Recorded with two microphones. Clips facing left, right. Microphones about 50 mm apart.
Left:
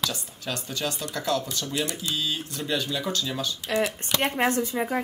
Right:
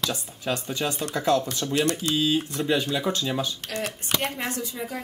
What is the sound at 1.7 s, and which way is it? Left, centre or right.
Speech, right.